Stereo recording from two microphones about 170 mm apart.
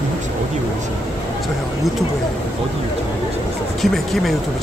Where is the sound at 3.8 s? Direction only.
Centre (ahead or behind).